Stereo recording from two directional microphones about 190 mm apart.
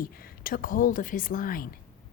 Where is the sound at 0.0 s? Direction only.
50° left (ahead or behind).